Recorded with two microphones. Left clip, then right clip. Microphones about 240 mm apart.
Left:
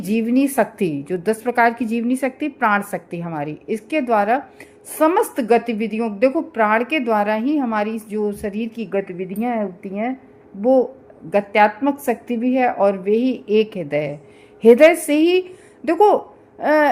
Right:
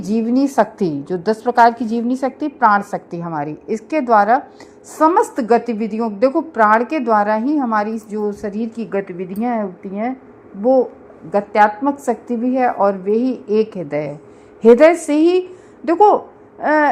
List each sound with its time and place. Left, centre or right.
0.1 s a woman's voice: centre
0.4 s a woman's voice: centre
0.8 s a woman's voice: centre
1.6 s a woman's voice: centre
3.8 s a woman's voice: centre